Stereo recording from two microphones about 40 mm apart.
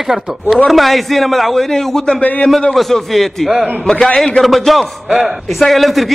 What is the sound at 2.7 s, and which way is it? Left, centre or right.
A man's voice, centre.